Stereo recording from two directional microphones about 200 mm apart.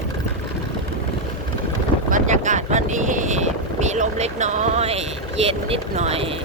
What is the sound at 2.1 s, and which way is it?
Boat, 40° right (ahead or behind).